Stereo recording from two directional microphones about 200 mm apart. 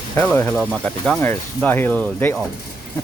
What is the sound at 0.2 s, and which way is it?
Speech, 10° left (ahead or behind).